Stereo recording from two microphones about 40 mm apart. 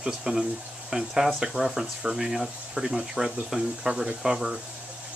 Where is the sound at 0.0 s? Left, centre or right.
Centre.